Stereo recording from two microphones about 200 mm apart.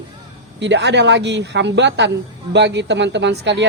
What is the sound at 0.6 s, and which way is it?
Speech, 60° right (ahead or behind).